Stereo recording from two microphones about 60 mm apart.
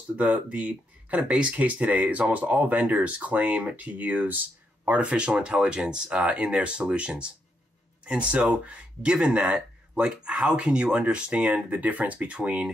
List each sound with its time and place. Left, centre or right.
0.2 s speech: right